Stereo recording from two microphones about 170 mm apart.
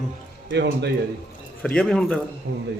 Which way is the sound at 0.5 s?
90° right.